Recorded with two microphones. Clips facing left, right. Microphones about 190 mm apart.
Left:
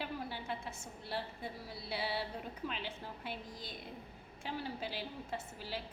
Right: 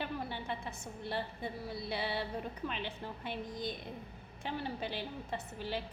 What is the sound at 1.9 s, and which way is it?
A woman's voice, 5° left (ahead or behind).